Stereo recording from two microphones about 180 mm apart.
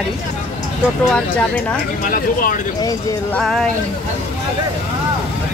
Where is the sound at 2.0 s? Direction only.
55° left (ahead or behind).